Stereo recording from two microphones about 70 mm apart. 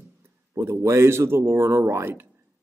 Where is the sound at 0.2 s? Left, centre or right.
Right.